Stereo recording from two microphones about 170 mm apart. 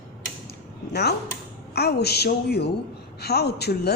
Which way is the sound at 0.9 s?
70° left (ahead or behind).